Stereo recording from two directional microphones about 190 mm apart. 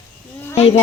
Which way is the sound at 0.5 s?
30° left (ahead or behind).